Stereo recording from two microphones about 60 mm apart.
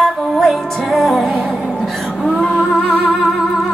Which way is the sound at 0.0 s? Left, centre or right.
Centre.